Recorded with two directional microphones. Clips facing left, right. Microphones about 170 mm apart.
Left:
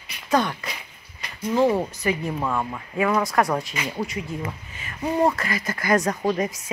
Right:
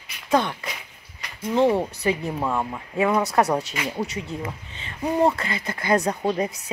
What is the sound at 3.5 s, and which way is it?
Speech, 5° right (ahead or behind).